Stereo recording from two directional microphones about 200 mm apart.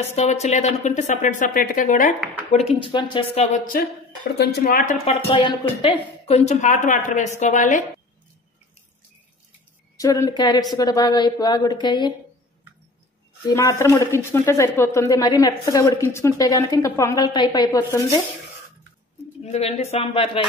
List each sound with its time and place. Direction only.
0.0 s a woman's voice: 35° left (ahead or behind)
2.7 s a woman's voice: 25° left (ahead or behind)
4.4 s speech: 50° left (ahead or behind)
5.0 s a woman's voice: 25° left (ahead or behind)
9.9 s a woman's voice: 15° left (ahead or behind)
13.5 s speech: 15° left (ahead or behind)
19.4 s a woman's voice: 35° left (ahead or behind)